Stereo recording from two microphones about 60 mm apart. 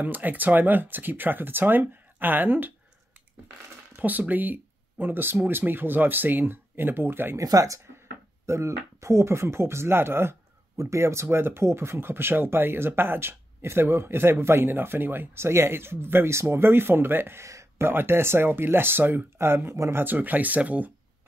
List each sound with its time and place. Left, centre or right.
0.0 s speech: right
3.9 s speech: right
7.3 s speech: right
8.5 s speech: right
10.8 s speech: right